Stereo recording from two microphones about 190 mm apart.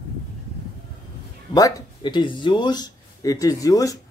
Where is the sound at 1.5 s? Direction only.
20° left (ahead or behind).